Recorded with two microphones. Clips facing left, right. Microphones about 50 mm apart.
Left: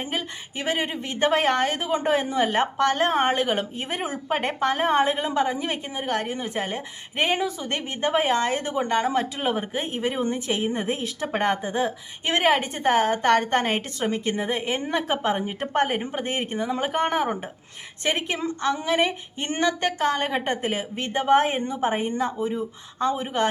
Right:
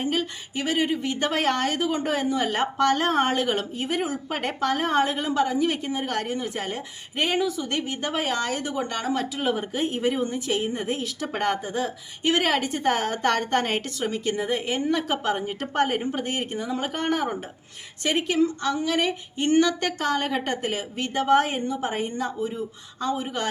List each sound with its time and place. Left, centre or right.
0.5 s a woman's voice: left
3.8 s a woman's voice: left